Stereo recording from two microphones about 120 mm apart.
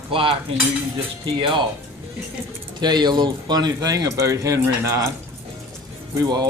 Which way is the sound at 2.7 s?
35° right (ahead or behind).